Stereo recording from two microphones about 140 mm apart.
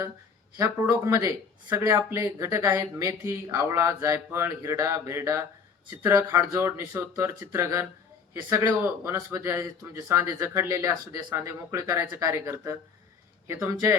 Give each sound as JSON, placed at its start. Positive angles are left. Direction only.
{"t": 0.5, "sound": "speech", "side_deg": -25}